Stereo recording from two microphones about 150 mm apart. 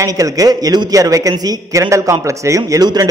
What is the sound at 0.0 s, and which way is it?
A man's voice, 25° right (ahead or behind).